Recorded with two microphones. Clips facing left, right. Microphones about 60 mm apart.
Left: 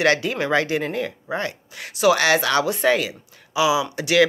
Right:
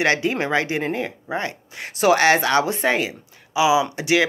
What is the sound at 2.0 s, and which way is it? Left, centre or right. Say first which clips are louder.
Speech: right 1 dB; right.